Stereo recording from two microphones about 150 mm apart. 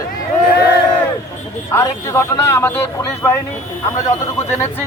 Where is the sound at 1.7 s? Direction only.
15° left (ahead or behind).